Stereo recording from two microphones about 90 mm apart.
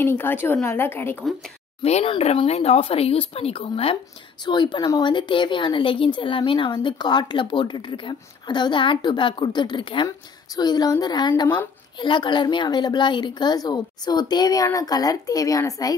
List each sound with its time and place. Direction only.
0.0 s a woman's voice: 25° left (ahead or behind)
2.0 s speech: 90° left
4.5 s a woman's voice: 55° left (ahead or behind)
10.0 s a woman's voice: 45° left (ahead or behind)